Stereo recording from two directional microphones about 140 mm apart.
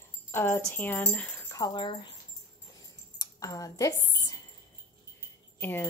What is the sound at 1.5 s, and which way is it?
Speech, 30° left (ahead or behind).